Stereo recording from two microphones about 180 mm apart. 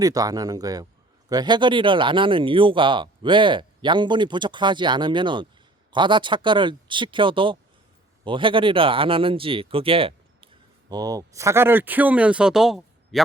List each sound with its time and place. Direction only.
0.0 s speech: 20° right (ahead or behind); by 13.2 s centre (ahead or behind)